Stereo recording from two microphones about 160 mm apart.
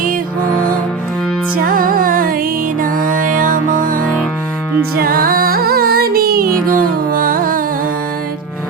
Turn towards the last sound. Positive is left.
turn(degrees=-60)  # may be behind; listen again after turning